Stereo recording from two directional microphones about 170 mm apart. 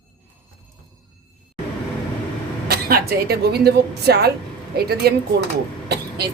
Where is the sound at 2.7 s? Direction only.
65° right (ahead or behind).